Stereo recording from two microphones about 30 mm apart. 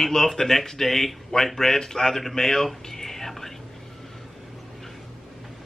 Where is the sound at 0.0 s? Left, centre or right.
Centre.